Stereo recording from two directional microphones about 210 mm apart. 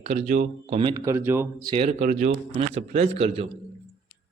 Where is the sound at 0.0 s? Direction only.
35° right (ahead or behind).